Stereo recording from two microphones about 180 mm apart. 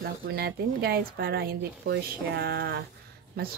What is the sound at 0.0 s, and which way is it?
Speech, 60° right (ahead or behind).